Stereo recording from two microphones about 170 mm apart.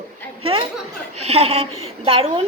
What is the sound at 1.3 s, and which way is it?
A woman's voice, 35° right (ahead or behind).